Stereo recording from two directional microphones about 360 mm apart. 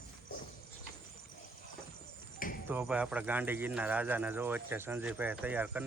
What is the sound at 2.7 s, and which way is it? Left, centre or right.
Speech, centre.